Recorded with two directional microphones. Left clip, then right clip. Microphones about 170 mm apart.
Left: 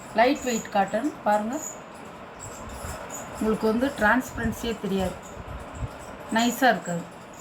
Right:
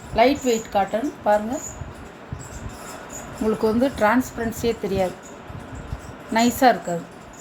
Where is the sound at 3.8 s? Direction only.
45° right (ahead or behind).